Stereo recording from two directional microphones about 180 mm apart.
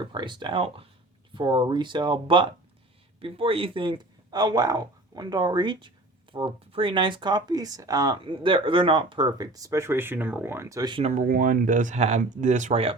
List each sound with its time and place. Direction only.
0.0 s speech: 25° right (ahead or behind)
11.2 s speech: 50° right (ahead or behind)